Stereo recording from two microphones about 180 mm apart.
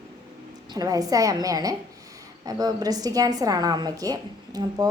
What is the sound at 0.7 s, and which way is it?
A woman's voice, 20° right (ahead or behind).